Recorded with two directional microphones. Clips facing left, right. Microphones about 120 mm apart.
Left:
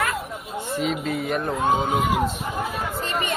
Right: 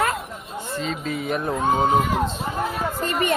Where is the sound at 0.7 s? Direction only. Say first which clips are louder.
Left 2 dB; 10° left (ahead or behind).